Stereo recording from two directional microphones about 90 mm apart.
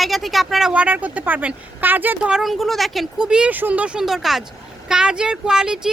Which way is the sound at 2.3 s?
Centre (ahead or behind).